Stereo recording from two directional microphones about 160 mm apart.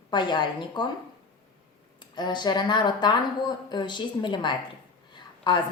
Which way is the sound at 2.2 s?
25° left (ahead or behind).